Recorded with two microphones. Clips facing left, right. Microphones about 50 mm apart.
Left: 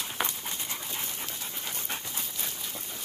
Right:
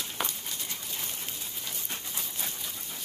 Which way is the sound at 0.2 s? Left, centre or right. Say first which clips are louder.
Left 2 dB; left.